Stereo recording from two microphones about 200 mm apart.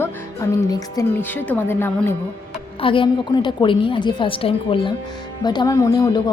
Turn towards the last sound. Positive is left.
turn(degrees=20)  # may be behind; listen again after turning